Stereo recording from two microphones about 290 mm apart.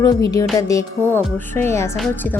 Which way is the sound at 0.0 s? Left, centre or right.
Centre.